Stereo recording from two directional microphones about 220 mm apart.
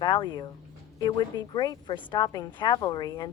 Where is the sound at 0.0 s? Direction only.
20° left (ahead or behind).